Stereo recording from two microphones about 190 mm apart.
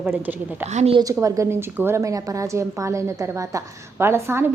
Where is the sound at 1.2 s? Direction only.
15° right (ahead or behind).